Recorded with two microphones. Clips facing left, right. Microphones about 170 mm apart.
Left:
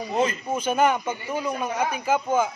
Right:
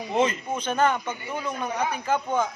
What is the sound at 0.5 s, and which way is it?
Speech, 10° left (ahead or behind).